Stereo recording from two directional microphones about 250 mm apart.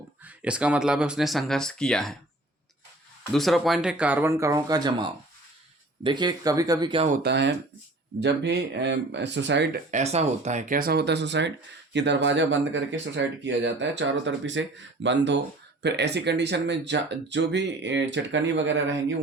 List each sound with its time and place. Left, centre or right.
0.3 s speech: centre
3.3 s speech: centre; by 7.2 s right
7.2 s speech: right
9.9 s speech: right